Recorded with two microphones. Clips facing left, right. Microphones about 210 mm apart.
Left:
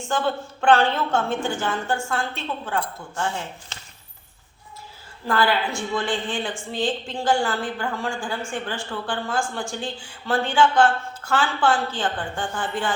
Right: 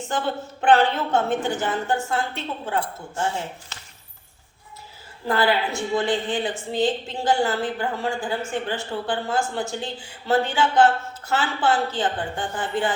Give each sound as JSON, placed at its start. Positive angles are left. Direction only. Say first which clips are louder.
{"t": 0.6, "sound": "a woman's voice", "louder": "even", "side_deg": -20}
{"t": 5.2, "sound": "a woman's voice", "louder": "right 1 dB", "side_deg": -20}